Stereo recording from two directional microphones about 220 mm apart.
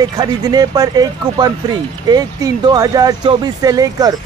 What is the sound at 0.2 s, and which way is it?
A man's voice, 20° right (ahead or behind).